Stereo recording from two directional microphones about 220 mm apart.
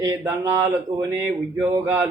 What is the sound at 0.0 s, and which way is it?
Speech, 15° right (ahead or behind).